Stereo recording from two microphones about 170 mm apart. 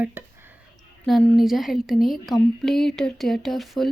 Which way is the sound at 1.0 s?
Centre (ahead or behind).